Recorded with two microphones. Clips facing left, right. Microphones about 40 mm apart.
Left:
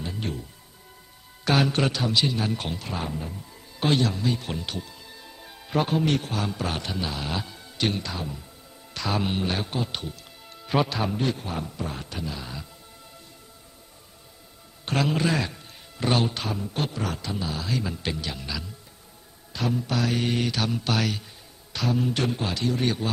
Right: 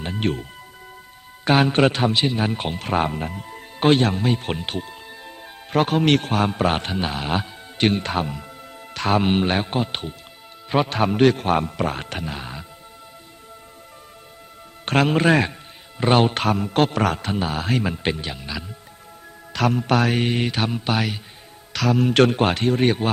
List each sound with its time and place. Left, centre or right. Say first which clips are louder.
0.0 s music: right 8 dB; right
1.5 s speech: right 6 dB; right
2.7 s speech: right 9 dB; right
3.8 s music: right 6 dB; right
5.7 s speech: right 6 dB; right
6.3 s speech: right 9 dB; right
8.9 s speech: right 8 dB; right
10.8 s speech: right 7 dB; right
11.2 s speech: right 11 dB; right
14.8 s speech: right 7 dB; right
18.3 s speech: right 3 dB; right
19.5 s speech: right 7 dB; right
21.7 s speech: right 6 dB; right